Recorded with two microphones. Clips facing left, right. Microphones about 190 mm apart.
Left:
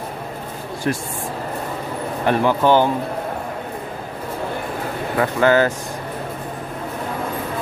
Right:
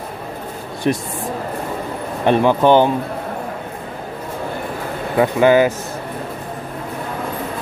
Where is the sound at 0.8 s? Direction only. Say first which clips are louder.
Right 4 dB; 20° right (ahead or behind).